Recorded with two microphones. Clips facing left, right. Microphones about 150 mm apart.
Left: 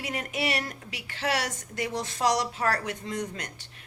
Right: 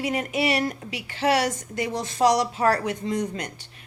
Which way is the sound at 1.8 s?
25° right (ahead or behind).